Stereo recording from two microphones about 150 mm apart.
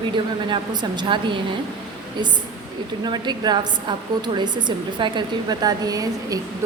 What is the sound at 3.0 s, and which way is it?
A woman's voice, 30° right (ahead or behind).